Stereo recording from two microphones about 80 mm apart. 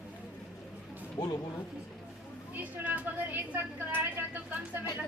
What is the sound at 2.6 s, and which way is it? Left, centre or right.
Vehicle, centre.